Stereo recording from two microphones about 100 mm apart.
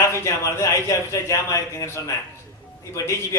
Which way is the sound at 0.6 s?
35° left (ahead or behind).